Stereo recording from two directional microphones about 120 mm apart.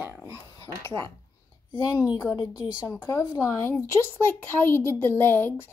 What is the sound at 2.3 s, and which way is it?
Speech, 35° left (ahead or behind).